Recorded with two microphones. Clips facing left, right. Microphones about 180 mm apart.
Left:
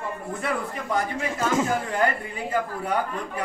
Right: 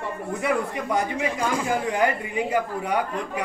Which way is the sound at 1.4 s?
25° left (ahead or behind).